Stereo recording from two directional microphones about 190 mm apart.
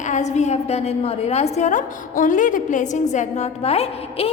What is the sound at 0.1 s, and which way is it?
A woman's voice, 40° left (ahead or behind).